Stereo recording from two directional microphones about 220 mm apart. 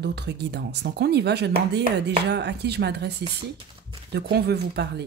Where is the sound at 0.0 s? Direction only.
50° right (ahead or behind).